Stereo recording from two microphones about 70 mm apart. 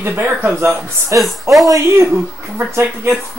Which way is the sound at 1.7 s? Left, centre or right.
Right.